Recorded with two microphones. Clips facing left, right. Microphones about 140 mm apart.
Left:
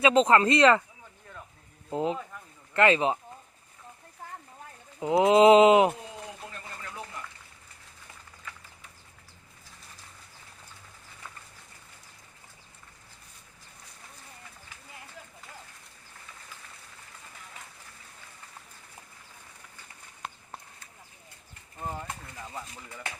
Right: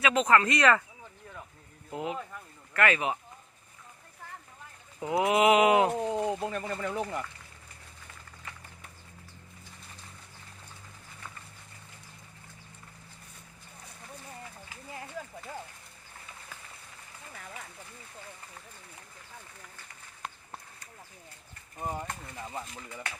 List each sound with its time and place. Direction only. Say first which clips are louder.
0.0 s speech: left 4 dB; 30° left (ahead or behind)
1.9 s speech: left 5 dB; 30° left (ahead or behind)
4.9 s speech: left 6 dB; 25° left (ahead or behind)
6.0 s speech: right 12 dB; 55° right (ahead or behind); by 7.2 s 80° right
21.8 s speech: right 1 dB; 15° right (ahead or behind)